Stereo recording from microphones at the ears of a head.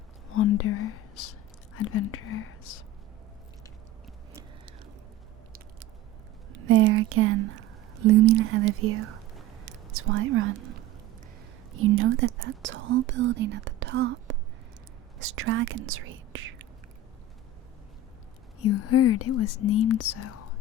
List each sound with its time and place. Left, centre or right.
0.3 s speech: left
6.5 s speech: right
9.6 s a sound: right
11.7 s speech: right
18.6 s speech: left